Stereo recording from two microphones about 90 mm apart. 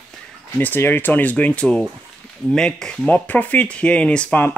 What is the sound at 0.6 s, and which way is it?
Speech, 20° left (ahead or behind).